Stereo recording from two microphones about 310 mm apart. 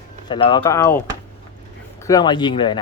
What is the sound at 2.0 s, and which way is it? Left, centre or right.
Speech, centre.